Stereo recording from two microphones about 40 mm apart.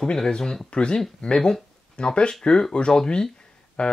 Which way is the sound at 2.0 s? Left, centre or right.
Left.